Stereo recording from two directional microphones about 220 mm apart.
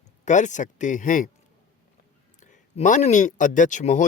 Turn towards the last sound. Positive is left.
turn(degrees=35)  # may be behind; listen again after turning